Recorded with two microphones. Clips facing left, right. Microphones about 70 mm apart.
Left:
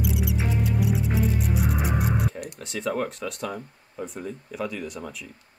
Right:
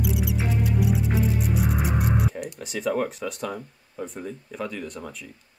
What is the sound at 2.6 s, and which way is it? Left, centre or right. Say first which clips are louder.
Speech: right 2 dB; centre.